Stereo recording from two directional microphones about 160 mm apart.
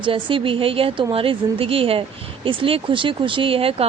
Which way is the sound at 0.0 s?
30° right (ahead or behind).